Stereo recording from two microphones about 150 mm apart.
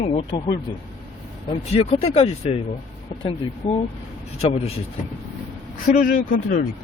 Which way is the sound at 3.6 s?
45° left (ahead or behind).